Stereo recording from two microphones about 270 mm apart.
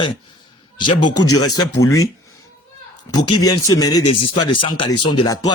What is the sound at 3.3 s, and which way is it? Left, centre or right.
A man's voice, centre.